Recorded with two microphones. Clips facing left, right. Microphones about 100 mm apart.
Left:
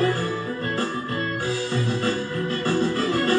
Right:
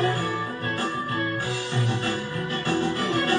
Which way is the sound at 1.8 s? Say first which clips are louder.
Left 1 dB; 20° right (ahead or behind).